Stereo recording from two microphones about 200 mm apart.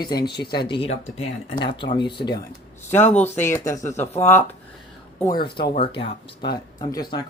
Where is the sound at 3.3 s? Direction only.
10° left (ahead or behind).